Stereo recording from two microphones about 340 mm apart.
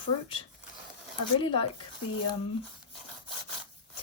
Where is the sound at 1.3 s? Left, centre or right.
Centre.